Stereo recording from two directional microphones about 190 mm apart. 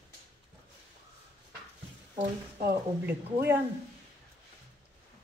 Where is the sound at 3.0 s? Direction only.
10° right (ahead or behind).